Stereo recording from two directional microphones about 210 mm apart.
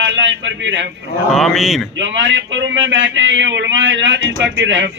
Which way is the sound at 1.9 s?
60° right (ahead or behind).